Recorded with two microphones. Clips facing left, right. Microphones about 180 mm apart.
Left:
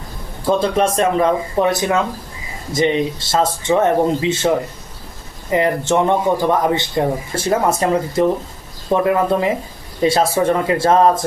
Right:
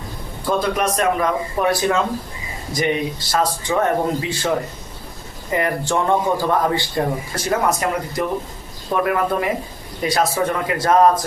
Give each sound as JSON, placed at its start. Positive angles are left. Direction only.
{"t": 0.4, "sound": "a man's voice", "side_deg": 25}